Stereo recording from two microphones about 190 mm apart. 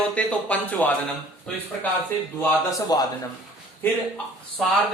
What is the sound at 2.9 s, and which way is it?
Speech, 20° left (ahead or behind).